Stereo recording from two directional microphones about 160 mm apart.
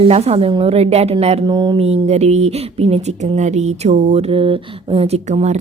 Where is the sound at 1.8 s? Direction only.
40° right (ahead or behind).